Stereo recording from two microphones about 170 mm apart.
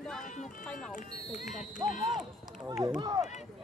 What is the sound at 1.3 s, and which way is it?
Basketball bounce, 45° left (ahead or behind).